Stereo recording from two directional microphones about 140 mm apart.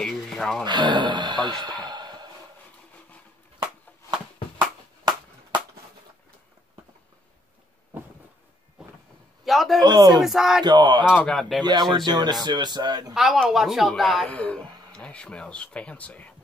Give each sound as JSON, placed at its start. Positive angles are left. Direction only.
{"t": 0.0, "sound": "a sound", "side_deg": 5}
{"t": 0.7, "sound": "speech", "side_deg": -30}
{"t": 1.6, "sound": "a sound", "side_deg": -30}
{"t": 9.4, "sound": "a sound", "side_deg": 0}
{"t": 9.8, "sound": "speech", "side_deg": -30}
{"t": 10.2, "sound": "a woman's voice", "side_deg": -5}
{"t": 10.6, "sound": "speech", "side_deg": -30}
{"t": 11.1, "sound": "a woman's voice", "side_deg": 5}
{"t": 11.6, "sound": "speech", "side_deg": -30}
{"t": 13.1, "sound": "a woman's voice", "side_deg": 0}